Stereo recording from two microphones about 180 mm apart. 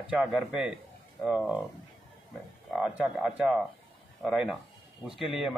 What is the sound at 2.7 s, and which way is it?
A man's voice, 5° right (ahead or behind).